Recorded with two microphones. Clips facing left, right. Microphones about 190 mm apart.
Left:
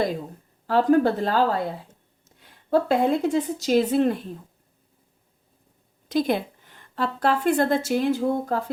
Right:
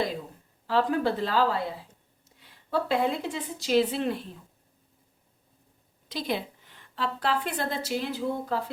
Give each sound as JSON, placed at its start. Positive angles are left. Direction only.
{"t": 0.7, "sound": "a woman's voice", "side_deg": 45}
{"t": 6.1, "sound": "a woman's voice", "side_deg": 50}